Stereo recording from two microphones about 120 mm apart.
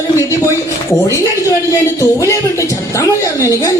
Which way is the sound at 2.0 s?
25° left (ahead or behind).